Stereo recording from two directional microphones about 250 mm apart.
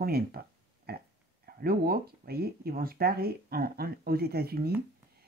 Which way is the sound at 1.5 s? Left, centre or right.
Right.